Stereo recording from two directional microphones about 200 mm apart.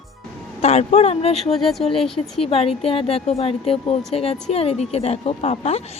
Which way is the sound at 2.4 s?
30° left (ahead or behind).